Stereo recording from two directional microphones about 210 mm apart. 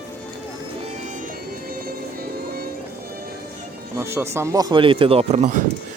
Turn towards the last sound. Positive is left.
turn(degrees=-35)  # may be behind; listen again after turning